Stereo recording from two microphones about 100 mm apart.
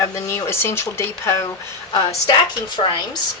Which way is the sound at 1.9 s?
45° left (ahead or behind).